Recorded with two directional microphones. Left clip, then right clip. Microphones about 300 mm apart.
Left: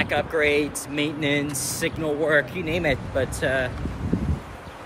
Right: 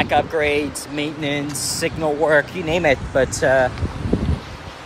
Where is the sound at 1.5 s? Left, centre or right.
Centre.